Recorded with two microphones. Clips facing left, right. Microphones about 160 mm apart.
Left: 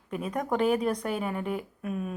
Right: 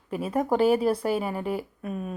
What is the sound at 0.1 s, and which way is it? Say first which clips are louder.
A woman's voice: right 4 dB; 5° right (ahead or behind).